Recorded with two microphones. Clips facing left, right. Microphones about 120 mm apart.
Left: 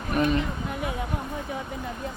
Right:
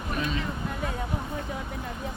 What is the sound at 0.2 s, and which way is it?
Speech, 55° left (ahead or behind).